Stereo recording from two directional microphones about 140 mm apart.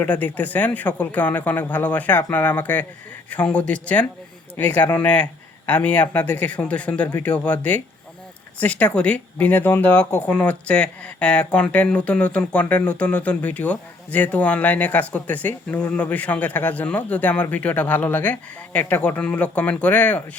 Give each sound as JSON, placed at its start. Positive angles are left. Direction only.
{"t": 0.0, "sound": "speech", "side_deg": 10}